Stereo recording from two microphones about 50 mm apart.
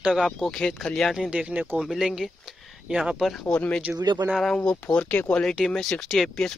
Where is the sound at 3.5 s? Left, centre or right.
Left.